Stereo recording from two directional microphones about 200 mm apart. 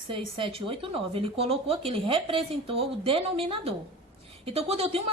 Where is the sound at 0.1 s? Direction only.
25° right (ahead or behind).